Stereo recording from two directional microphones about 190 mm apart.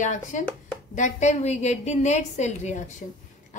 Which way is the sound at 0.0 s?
40° left (ahead or behind).